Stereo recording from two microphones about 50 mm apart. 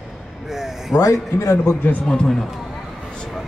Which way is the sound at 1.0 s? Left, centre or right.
Left.